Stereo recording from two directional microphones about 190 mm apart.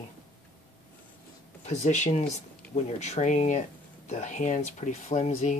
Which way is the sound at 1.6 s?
40° left (ahead or behind).